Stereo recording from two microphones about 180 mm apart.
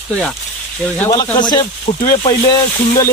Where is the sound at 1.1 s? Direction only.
20° left (ahead or behind).